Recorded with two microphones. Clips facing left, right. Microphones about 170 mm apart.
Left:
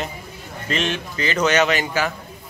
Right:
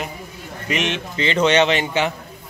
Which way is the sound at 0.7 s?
20° right (ahead or behind).